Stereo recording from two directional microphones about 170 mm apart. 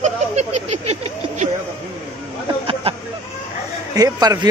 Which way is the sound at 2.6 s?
30° right (ahead or behind).